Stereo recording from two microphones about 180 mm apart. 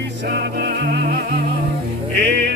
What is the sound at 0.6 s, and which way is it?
Music, 60° right (ahead or behind).